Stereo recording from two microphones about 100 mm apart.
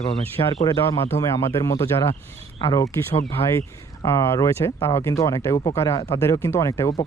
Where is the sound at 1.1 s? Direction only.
30° left (ahead or behind).